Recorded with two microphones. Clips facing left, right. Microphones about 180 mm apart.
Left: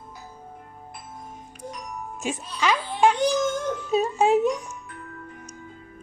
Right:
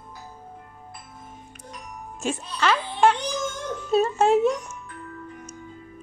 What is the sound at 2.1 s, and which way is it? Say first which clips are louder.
Music: right 3 dB; 15° left (ahead or behind).